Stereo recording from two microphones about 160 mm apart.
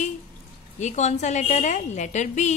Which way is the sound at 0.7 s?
45° left (ahead or behind).